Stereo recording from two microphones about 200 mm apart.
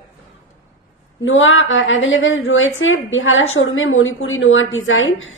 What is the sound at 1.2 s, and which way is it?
A woman's voice, 75° left (ahead or behind).